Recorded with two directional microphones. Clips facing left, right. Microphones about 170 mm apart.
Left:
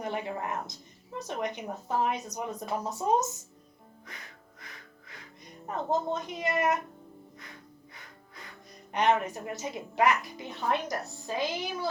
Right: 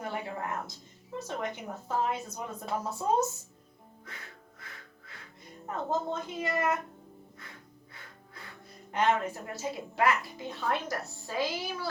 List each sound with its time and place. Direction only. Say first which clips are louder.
0.0 s a sound: left 2 dB; 20° left (ahead or behind)
1.3 s a woman's voice: left 3 dB; 20° left (ahead or behind)
4.6 s music: left 1 dB; 15° left (ahead or behind)
8.9 s a woman's voice: left 2 dB; 20° left (ahead or behind)